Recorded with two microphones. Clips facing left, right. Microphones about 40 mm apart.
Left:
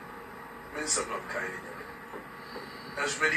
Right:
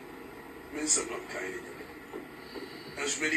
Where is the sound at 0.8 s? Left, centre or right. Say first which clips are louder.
Left 1 dB; left.